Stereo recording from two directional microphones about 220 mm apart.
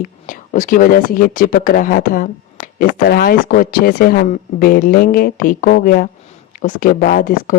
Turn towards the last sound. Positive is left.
turn(degrees=40)  # may be behind; listen again after turning